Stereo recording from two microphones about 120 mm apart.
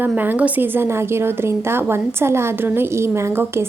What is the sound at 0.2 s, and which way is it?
A woman's voice, 15° right (ahead or behind).